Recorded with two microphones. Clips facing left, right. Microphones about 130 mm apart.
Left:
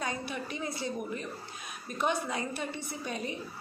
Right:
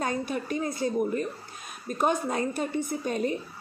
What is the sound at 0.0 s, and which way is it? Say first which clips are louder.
A woman's voice: right 6 dB; 45° right (ahead or behind).